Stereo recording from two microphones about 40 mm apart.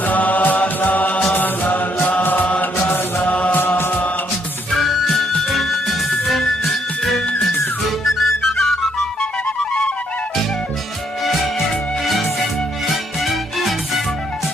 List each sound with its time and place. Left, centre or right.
0.0 s chant: left
0.8 s music: left
1.3 s chant: left
4.7 s music: centre
8.0 s music: centre
12.0 s music: centre